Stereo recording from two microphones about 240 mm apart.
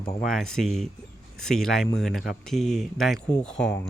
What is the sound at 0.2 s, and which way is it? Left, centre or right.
Speech, centre.